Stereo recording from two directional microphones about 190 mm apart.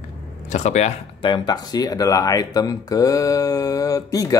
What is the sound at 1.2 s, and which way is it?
Speech, 25° left (ahead or behind).